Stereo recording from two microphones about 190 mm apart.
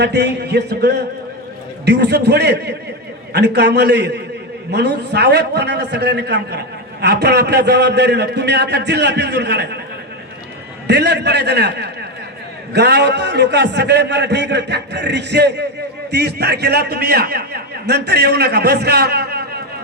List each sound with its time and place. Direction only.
0.0 s a man's voice: 60° right (ahead or behind)
10.8 s a man's voice: 60° right (ahead or behind)